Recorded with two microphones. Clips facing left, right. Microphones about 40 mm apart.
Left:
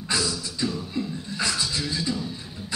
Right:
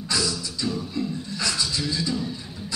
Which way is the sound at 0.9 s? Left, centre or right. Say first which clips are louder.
Right 1 dB; left.